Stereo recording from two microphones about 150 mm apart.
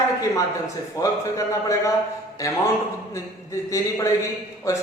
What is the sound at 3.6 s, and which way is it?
Speech, 20° left (ahead or behind).